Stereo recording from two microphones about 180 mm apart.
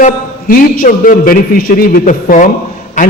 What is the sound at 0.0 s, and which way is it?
A man's voice, 50° left (ahead or behind).